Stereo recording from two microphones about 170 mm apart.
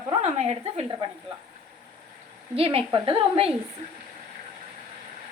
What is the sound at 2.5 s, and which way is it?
Speech, 35° right (ahead or behind).